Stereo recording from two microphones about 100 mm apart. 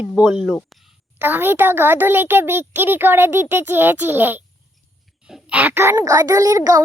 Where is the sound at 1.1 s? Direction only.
20° right (ahead or behind).